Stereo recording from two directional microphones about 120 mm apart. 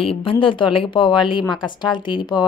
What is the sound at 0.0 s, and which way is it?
A woman's voice, 50° left (ahead or behind).